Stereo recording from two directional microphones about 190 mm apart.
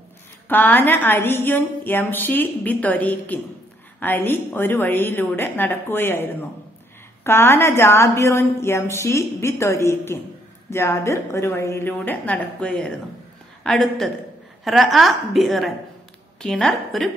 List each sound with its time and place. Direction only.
0.5 s a woman's voice: 10° left (ahead or behind)